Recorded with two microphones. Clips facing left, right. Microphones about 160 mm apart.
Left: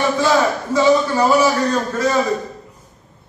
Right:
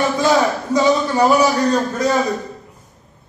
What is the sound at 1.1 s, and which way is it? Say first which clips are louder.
A man's voice: right 1 dB; 20° right (ahead or behind).